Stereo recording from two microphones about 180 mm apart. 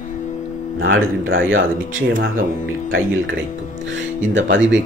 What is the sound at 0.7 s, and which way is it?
A man's voice, 90° right.